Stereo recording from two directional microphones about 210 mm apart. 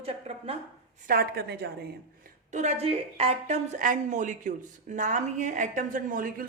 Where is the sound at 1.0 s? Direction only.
45° right (ahead or behind).